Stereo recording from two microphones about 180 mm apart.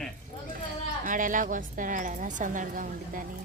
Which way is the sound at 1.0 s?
45° right (ahead or behind).